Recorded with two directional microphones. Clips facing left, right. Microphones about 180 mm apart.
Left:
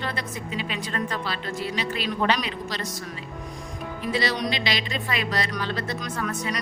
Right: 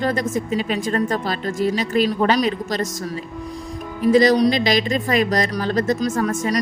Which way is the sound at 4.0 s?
45° right (ahead or behind).